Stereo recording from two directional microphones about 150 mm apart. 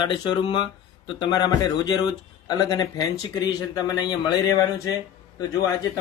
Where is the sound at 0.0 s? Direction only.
30° left (ahead or behind).